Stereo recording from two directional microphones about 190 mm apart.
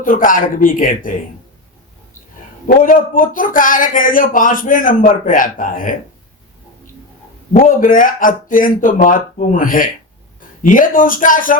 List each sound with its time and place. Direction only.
0.0 s speech: 45° left (ahead or behind)
2.6 s speech: 45° left (ahead or behind)
7.7 s speech: 45° left (ahead or behind)